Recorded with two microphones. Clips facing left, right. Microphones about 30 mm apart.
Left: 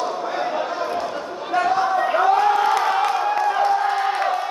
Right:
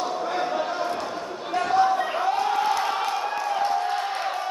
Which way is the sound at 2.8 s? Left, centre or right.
Left.